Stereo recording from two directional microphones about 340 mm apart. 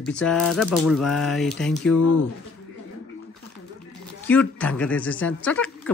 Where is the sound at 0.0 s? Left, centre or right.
Centre.